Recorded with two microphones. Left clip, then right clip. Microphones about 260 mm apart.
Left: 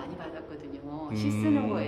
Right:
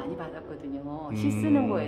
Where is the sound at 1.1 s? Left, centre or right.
Centre.